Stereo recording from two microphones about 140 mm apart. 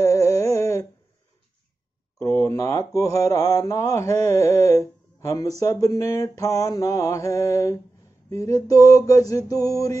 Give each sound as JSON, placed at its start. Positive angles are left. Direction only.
{"t": 0.0, "sound": "humming", "side_deg": 20}
{"t": 2.1, "sound": "speech", "side_deg": 20}